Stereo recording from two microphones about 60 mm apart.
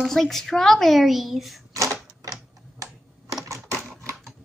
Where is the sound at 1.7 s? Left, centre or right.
Right.